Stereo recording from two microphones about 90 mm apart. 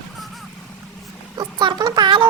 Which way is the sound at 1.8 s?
45° right (ahead or behind).